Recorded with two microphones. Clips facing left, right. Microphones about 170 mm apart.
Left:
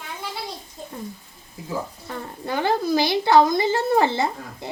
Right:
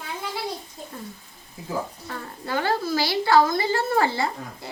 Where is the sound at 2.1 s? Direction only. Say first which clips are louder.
Left 2 dB; 20° left (ahead or behind).